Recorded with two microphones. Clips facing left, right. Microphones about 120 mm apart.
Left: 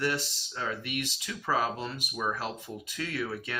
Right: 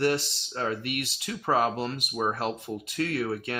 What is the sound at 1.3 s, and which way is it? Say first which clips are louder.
Speech: right 5 dB; 35° right (ahead or behind).